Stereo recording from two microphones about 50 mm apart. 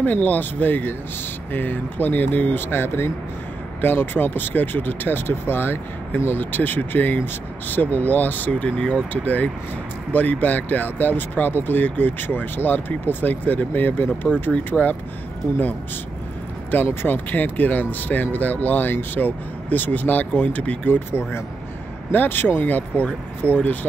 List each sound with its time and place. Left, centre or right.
0.0 s speech: left; by 9.0 s centre
9.1 s speech: left
17.0 s speech: left
21.1 s speech: left